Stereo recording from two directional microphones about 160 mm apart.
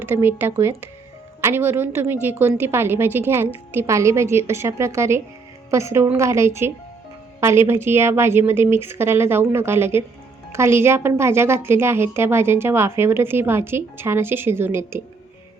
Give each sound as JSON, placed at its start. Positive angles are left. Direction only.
{"t": 0.1, "sound": "a woman's voice", "side_deg": -10}